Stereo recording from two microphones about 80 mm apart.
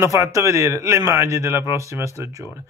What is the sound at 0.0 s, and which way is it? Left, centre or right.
Speech, right.